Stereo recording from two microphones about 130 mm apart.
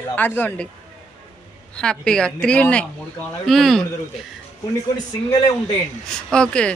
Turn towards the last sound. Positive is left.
turn(degrees=5)  # may be behind; listen again after turning